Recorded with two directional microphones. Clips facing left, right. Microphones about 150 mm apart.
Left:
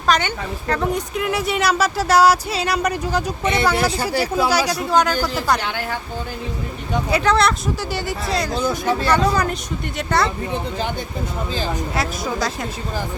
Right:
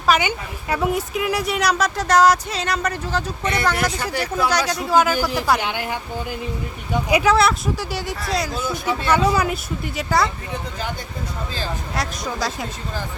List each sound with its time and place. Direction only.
0.1 s speech: 10° right (ahead or behind); by 3.7 s 20° left (ahead or behind)
3.8 s speech: 30° left (ahead or behind)
4.4 s a woman's voice: 5° left (ahead or behind); by 6.0 s 15° right (ahead or behind)
7.1 s a woman's voice: 5° right (ahead or behind)
8.5 s speech: 40° left (ahead or behind)
9.0 s a woman's voice: 10° right (ahead or behind)
11.9 s a woman's voice: centre (ahead or behind)